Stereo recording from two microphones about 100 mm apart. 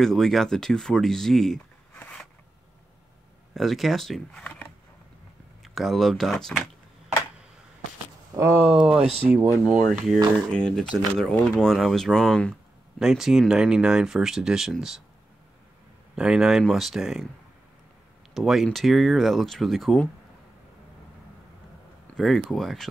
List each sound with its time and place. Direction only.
0.0 s speech: 5° left (ahead or behind)
2.0 s a sound: 10° left (ahead or behind)
3.5 s speech: centre (ahead or behind)
5.6 s speech: centre (ahead or behind)
8.4 s speech: 25° right (ahead or behind)
8.6 s speech: 10° right (ahead or behind)
9.0 s speech: 80° right
9.7 s speech: centre (ahead or behind)
13.0 s speech: 5° right (ahead or behind)
16.2 s speech: 5° right (ahead or behind)
18.3 s speech: centre (ahead or behind)
22.1 s speech: 5° left (ahead or behind)